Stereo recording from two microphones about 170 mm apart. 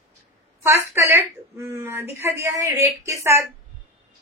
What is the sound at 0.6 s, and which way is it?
Speech, 15° right (ahead or behind).